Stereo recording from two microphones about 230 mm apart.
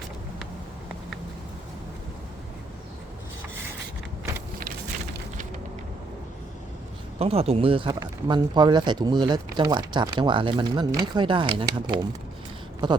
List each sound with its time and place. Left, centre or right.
7.2 s speech: right